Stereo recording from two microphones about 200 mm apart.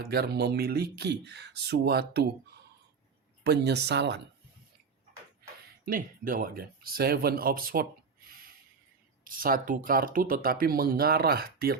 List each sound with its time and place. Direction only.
0.1 s speech: 50° right (ahead or behind)
3.4 s speech: 55° right (ahead or behind)
5.8 s speech: 45° right (ahead or behind)